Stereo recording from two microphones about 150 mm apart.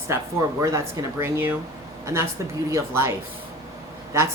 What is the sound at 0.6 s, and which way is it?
Speech, 20° right (ahead or behind).